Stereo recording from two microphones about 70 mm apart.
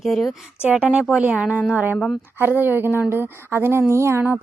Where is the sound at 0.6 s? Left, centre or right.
Centre.